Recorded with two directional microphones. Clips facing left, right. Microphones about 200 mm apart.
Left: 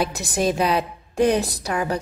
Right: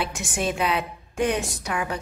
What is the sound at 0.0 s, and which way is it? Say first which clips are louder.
A woman's voice: left 5 dB; 35° left (ahead or behind).